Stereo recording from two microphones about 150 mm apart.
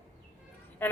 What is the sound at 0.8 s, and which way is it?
Speech, 15° left (ahead or behind).